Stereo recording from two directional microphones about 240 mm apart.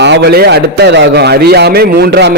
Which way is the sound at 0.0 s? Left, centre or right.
Right.